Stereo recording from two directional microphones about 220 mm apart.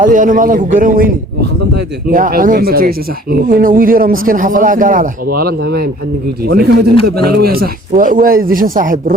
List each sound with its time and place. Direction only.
0.0 s speech: 35° right (ahead or behind)